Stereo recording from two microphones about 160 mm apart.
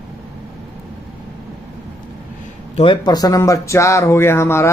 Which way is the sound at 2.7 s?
35° left (ahead or behind).